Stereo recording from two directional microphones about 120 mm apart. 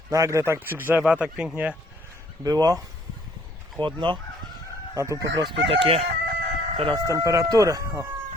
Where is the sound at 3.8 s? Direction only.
40° right (ahead or behind).